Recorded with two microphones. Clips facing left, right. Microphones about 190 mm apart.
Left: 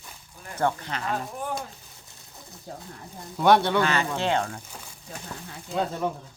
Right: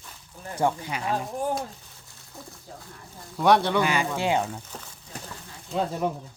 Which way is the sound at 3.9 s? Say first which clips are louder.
Even; 10° right (ahead or behind).